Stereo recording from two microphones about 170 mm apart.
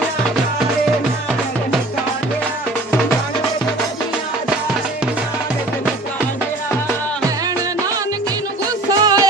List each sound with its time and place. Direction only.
8.9 s music: 20° right (ahead or behind)